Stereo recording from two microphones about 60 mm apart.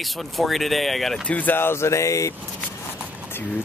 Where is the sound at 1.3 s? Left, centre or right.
Left.